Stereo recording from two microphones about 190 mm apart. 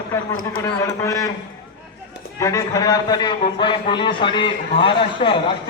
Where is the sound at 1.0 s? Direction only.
15° left (ahead or behind).